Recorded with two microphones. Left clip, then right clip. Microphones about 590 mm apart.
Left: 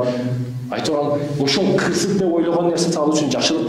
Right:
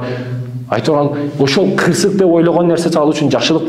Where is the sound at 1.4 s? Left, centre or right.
Right.